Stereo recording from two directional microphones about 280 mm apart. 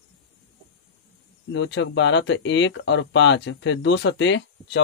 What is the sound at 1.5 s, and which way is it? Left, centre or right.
Speech, left.